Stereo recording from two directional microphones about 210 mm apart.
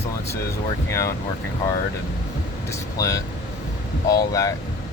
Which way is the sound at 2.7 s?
15° left (ahead or behind).